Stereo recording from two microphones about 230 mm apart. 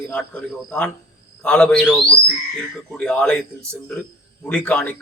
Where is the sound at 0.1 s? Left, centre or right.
Centre.